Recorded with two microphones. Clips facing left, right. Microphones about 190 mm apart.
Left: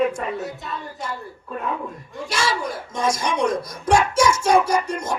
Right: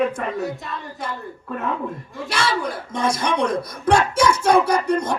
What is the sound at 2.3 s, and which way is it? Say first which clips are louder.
Speech: right 1 dB; 60° right (ahead or behind).